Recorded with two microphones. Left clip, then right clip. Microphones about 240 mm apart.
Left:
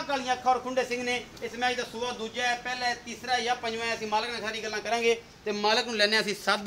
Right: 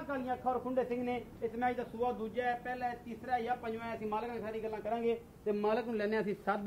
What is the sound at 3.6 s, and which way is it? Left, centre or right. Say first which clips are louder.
Speech: left 9 dB; right.